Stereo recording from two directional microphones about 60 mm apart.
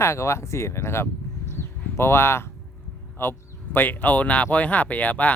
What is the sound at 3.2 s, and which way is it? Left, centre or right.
Speech, left.